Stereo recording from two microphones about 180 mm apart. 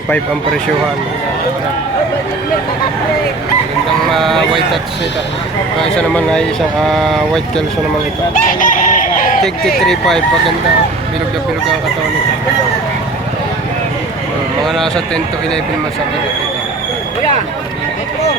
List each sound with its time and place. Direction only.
4.1 s speech: centre (ahead or behind)
6.0 s speech: 5° left (ahead or behind)
8.3 s chicken: 50° left (ahead or behind)
9.7 s speech: centre (ahead or behind)
14.7 s speech: 5° left (ahead or behind)